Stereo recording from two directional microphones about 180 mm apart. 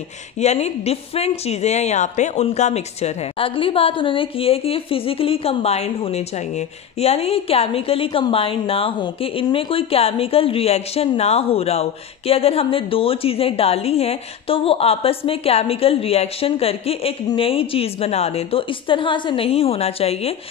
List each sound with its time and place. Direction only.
0.4 s speech: 35° left (ahead or behind)